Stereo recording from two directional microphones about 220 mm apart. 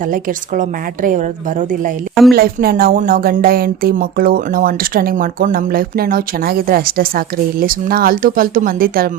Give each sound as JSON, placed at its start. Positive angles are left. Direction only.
{"t": 0.1, "sound": "speech", "side_deg": -35}